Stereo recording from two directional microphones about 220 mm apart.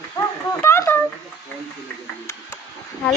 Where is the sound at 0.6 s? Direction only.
10° left (ahead or behind).